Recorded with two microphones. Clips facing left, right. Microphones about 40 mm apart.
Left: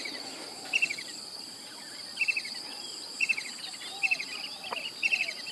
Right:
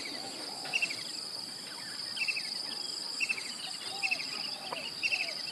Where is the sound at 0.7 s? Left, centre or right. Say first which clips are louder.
Left 4 dB; left.